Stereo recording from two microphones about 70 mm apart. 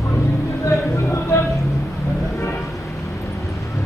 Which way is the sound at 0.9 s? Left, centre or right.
Left.